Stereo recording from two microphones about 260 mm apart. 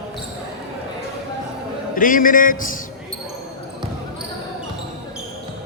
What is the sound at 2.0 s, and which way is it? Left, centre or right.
Speech, left.